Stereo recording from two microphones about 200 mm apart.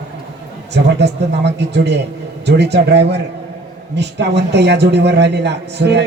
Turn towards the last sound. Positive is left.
turn(degrees=-60)  # may be behind; listen again after turning